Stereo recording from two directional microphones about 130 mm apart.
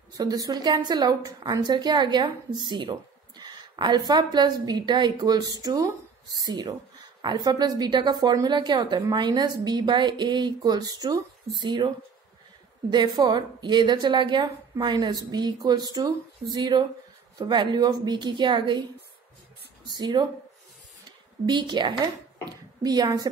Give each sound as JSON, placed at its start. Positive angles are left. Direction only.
{"t": 0.1, "sound": "a woman's voice", "side_deg": -30}
{"t": 12.9, "sound": "a woman's voice", "side_deg": -35}
{"t": 19.9, "sound": "a woman's voice", "side_deg": -35}
{"t": 21.5, "sound": "speech", "side_deg": -35}